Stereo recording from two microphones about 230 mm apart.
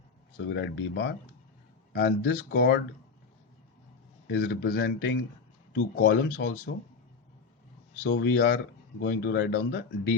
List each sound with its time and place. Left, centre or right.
0.5 s speech: left
4.3 s speech: left
8.0 s speech: left